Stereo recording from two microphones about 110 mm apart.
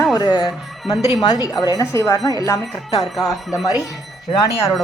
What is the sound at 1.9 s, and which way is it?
Speech, 25° left (ahead or behind).